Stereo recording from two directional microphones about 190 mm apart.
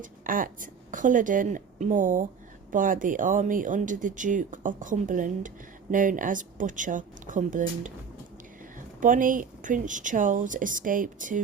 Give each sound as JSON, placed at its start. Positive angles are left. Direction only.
{"t": 0.0, "sound": "speech", "side_deg": -45}
{"t": 9.0, "sound": "speech", "side_deg": -45}